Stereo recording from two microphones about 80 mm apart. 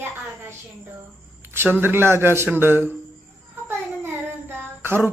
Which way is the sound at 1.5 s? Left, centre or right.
Right.